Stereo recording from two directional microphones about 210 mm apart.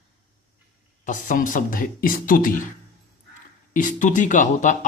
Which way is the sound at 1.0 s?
40° left (ahead or behind).